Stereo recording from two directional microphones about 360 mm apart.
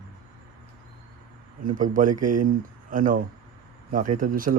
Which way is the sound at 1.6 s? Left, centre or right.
Right.